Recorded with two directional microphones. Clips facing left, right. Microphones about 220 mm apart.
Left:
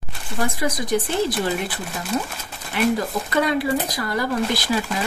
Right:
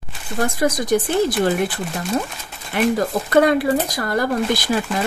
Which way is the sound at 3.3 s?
50° right (ahead or behind).